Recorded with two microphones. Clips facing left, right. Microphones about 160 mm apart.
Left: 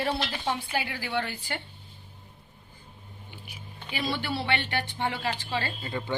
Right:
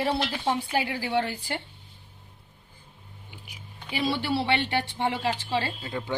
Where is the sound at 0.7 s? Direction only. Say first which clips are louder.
Right 4 dB; 30° right (ahead or behind).